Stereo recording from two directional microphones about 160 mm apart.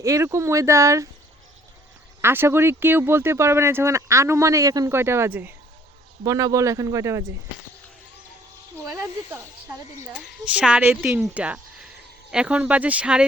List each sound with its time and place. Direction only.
0.0 s speech: 20° right (ahead or behind)
2.2 s speech: 15° right (ahead or behind)
8.9 s speech: 15° right (ahead or behind)
10.1 s speech: 5° right (ahead or behind)